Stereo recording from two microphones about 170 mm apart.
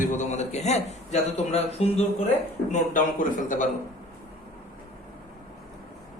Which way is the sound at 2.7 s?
50° left (ahead or behind).